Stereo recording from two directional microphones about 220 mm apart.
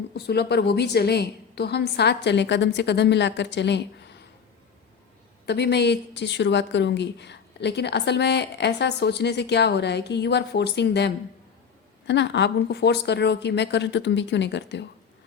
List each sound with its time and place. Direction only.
0.1 s speech: 50° left (ahead or behind)
5.5 s speech: 50° left (ahead or behind)